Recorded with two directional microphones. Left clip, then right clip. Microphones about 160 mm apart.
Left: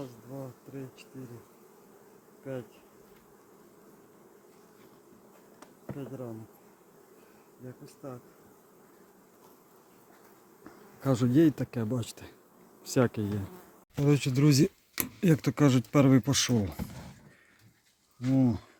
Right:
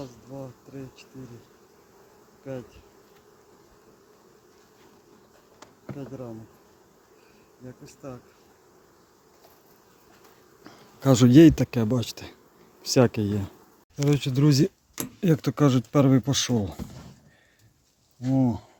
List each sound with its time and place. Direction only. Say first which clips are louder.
0.0 s bee: right 3 dB; centre (ahead or behind)
2.4 s bee: right 2 dB; 5° right (ahead or behind)
5.5 s bee: right 3 dB; 10° right (ahead or behind)
7.9 s bee: right 3 dB; 15° right (ahead or behind)
10.6 s speech: right 7 dB; 70° right (ahead or behind); by 11.9 s 50° right (ahead or behind)
11.9 s speech: right 8 dB; 35° right (ahead or behind)
14.0 s speech: right 3 dB; centre (ahead or behind)
18.3 s speech: right 3 dB; centre (ahead or behind)